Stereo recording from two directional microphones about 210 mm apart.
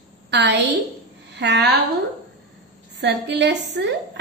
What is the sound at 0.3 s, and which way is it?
A woman's voice, 55° right (ahead or behind).